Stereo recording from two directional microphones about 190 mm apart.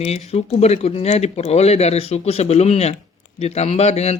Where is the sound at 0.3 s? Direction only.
35° left (ahead or behind).